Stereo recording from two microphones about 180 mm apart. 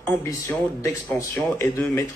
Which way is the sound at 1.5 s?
10° left (ahead or behind).